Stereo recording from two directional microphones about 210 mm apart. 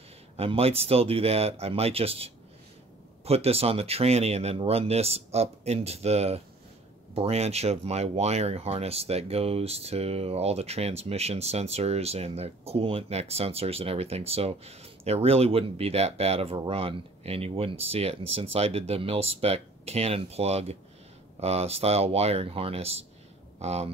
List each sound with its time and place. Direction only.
0.4 s speech: 30° right (ahead or behind)